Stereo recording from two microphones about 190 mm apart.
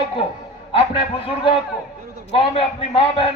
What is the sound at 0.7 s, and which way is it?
Music, 30° left (ahead or behind).